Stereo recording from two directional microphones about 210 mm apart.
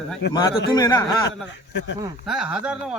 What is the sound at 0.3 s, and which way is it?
Speech, 20° left (ahead or behind).